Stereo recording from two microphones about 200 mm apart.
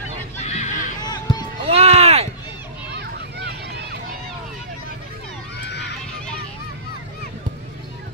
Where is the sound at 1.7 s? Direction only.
30° right (ahead or behind).